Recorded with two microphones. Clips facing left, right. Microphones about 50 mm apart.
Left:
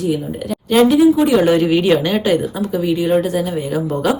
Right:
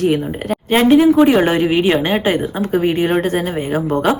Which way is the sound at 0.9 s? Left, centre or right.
Right.